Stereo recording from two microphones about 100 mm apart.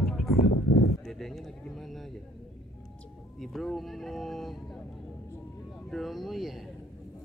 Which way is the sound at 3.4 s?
Centre (ahead or behind).